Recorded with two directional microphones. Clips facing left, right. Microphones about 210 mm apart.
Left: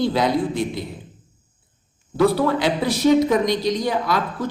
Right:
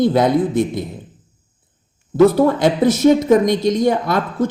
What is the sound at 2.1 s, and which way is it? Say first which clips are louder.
A woman's voice: right 6 dB; 45° right (ahead or behind).